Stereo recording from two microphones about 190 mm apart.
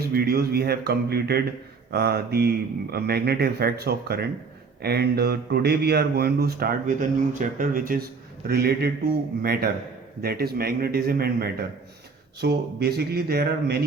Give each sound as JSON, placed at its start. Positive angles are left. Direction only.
{"t": 0.1, "sound": "speech", "side_deg": -55}